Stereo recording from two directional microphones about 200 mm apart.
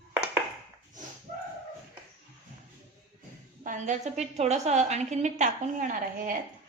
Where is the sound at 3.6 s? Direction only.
40° right (ahead or behind).